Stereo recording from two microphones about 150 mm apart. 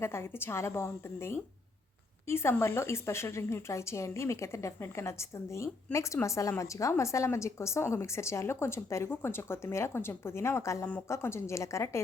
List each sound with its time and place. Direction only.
0.0 s a woman's voice: 15° left (ahead or behind)